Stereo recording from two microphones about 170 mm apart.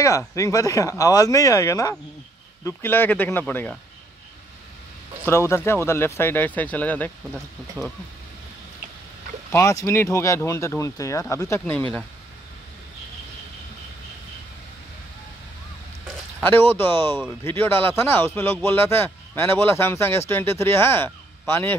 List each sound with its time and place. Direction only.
0.3 s speech: 20° left (ahead or behind)
5.2 s speech: 15° left (ahead or behind)
7.3 s speech: centre (ahead or behind)
9.5 s speech: 15° left (ahead or behind)
16.4 s speech: 15° left (ahead or behind)